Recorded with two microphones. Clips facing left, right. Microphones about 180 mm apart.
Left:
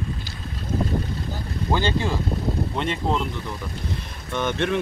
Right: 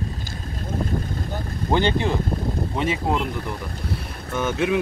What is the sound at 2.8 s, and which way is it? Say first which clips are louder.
Speech: right 3 dB; 10° right (ahead or behind).